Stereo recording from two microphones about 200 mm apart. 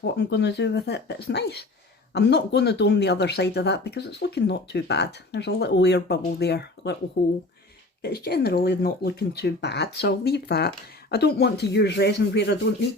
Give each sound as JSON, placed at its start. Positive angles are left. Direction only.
{"t": 0.0, "sound": "speech", "side_deg": 60}